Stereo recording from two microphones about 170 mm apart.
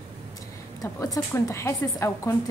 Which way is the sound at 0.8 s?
20° left (ahead or behind).